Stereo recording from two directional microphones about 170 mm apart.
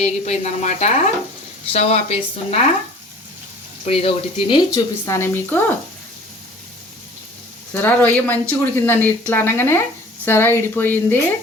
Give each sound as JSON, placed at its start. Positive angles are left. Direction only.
{"t": 0.0, "sound": "speech", "side_deg": 40}
{"t": 3.8, "sound": "speech", "side_deg": 35}
{"t": 7.7, "sound": "speech", "side_deg": 10}